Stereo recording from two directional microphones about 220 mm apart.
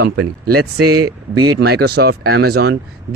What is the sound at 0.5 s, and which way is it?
Speech, 90° right.